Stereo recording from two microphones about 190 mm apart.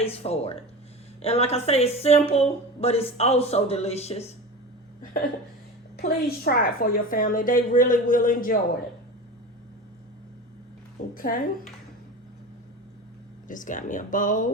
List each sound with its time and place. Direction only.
0.0 s a woman's voice: 30° left (ahead or behind)
6.0 s a woman's voice: 55° left (ahead or behind)
11.1 s a woman's voice: 50° left (ahead or behind)
13.5 s a woman's voice: 45° left (ahead or behind)